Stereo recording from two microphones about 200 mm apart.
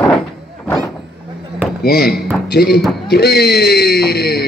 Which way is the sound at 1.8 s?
50° left (ahead or behind).